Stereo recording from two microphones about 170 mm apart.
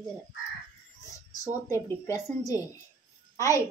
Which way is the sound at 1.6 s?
20° left (ahead or behind).